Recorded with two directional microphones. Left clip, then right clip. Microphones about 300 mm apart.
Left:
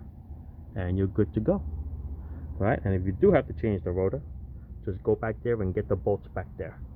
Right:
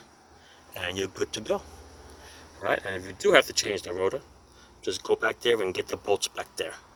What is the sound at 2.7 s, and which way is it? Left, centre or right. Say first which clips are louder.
Speech: right 2 dB; right.